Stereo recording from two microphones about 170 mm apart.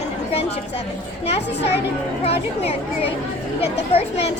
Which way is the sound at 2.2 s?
35° left (ahead or behind).